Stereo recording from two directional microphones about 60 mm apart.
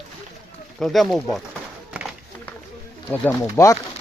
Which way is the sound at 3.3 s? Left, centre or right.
Left.